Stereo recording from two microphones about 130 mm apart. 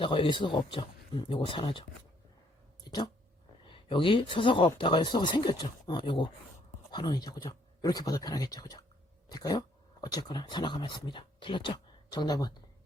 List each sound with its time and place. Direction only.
0.0 s speech: 40° left (ahead or behind)
2.9 s a sound: 35° left (ahead or behind)
3.7 s speech: 40° left (ahead or behind)